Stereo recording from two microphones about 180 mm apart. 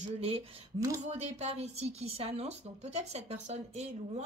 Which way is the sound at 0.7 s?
15° right (ahead or behind).